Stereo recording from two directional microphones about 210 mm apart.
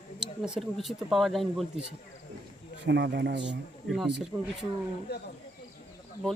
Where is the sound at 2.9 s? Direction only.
55° right (ahead or behind).